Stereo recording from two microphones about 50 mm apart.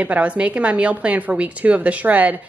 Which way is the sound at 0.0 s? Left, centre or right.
Right.